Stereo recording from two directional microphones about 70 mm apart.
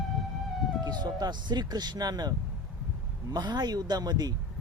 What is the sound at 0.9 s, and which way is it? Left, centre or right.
Speech, right.